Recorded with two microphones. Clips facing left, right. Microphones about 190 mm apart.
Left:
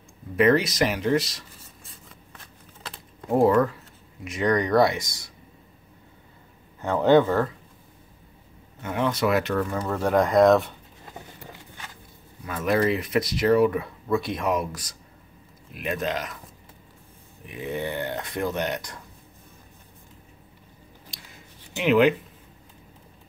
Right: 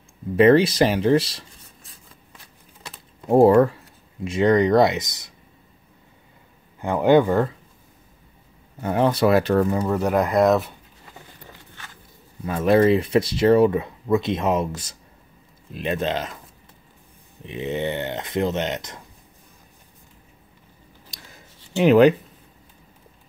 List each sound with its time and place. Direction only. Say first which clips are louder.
0.4 s speech: right 5 dB; 30° right (ahead or behind)
3.3 s speech: right 5 dB; 30° right (ahead or behind)
6.8 s speech: right 2 dB; 15° right (ahead or behind)
8.8 s speech: right 5 dB; 35° right (ahead or behind)
9.7 s speech: right 3 dB; 10° right (ahead or behind)
11.1 s a sound: left 3 dB; 15° left (ahead or behind)
12.4 s speech: right 6 dB; 30° right (ahead or behind)
17.5 s speech: right 4 dB; 25° right (ahead or behind)
21.1 s a sound: right 2 dB; 40° right (ahead or behind)
21.7 s speech: right 5 dB; 40° right (ahead or behind)